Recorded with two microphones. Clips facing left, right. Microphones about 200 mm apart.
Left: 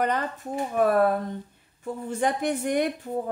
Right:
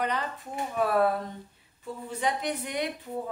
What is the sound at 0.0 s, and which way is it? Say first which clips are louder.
A woman's voice: left 4 dB; 45° left (ahead or behind).